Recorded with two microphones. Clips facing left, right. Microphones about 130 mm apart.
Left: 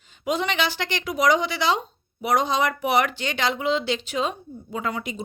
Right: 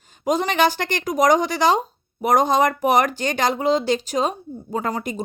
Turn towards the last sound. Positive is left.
turn(degrees=-45)  # may be behind; listen again after turning